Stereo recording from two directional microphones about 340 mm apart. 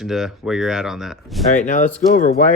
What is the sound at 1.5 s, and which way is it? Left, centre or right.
Speech, left.